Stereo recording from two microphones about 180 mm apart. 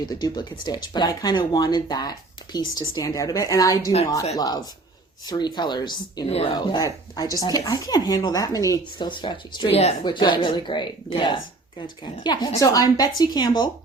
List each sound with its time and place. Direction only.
0.0 s speech: 25° left (ahead or behind)